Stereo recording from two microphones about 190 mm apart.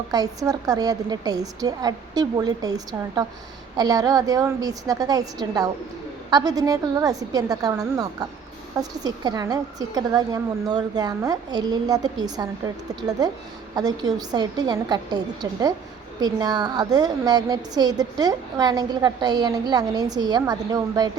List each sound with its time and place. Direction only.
0.1 s a woman's voice: 20° right (ahead or behind)